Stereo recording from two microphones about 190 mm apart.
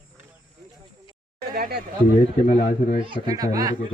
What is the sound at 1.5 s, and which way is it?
Speech, 50° right (ahead or behind).